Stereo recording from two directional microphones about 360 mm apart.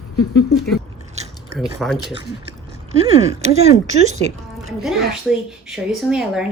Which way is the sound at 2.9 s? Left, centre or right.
Centre.